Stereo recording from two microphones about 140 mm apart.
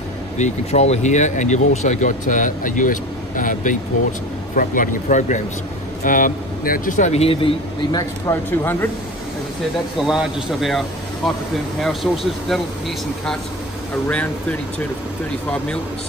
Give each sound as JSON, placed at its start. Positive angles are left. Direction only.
{"t": 0.4, "sound": "speech", "side_deg": 50}
{"t": 8.3, "sound": "speech", "side_deg": 15}
{"t": 10.0, "sound": "speech", "side_deg": 0}
{"t": 11.8, "sound": "speech", "side_deg": 0}
{"t": 14.0, "sound": "speech", "side_deg": 10}